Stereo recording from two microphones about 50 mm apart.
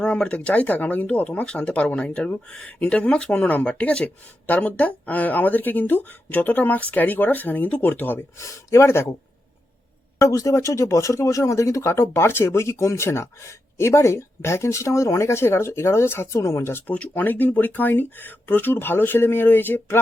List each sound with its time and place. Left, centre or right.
0.0 s speech: left
8.4 s speech: left
10.2 s speech: left
12.5 s speech: left
16.9 s speech: left
17.2 s speech: left